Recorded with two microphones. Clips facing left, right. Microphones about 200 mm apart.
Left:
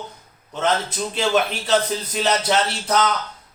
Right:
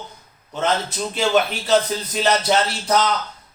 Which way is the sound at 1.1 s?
5° right (ahead or behind).